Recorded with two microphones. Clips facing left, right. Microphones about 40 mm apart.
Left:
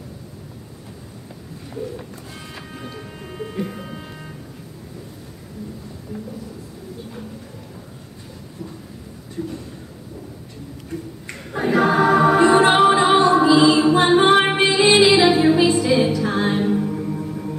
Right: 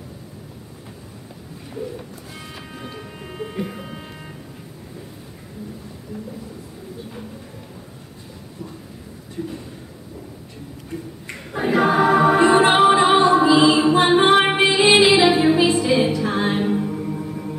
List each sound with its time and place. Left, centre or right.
11.5 s choir: centre
12.4 s music: centre